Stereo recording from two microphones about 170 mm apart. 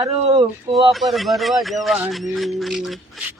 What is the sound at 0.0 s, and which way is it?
Speech, 40° right (ahead or behind).